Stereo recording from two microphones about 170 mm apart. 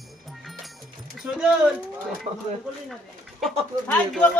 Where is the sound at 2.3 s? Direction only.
35° right (ahead or behind).